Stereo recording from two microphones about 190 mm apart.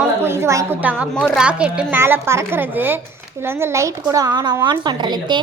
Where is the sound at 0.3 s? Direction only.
15° right (ahead or behind).